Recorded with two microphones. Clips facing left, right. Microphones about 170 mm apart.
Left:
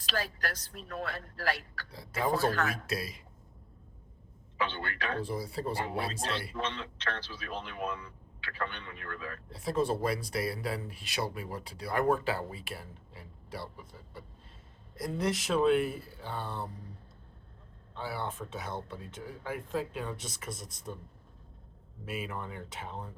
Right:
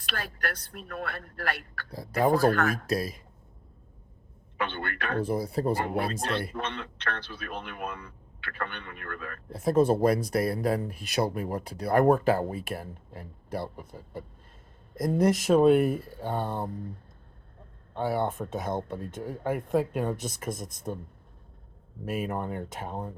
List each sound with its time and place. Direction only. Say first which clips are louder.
0.0 s speech: even; 60° right (ahead or behind); by 3.2 s 45° right (ahead or behind)
4.5 s a man's voice: right 2 dB; 60° right (ahead or behind)
17.9 s a man's voice: right 9 dB; 50° right (ahead or behind)
22.0 s a man's voice: right 7 dB; 50° right (ahead or behind)